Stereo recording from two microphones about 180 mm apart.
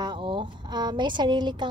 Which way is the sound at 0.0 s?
25° right (ahead or behind).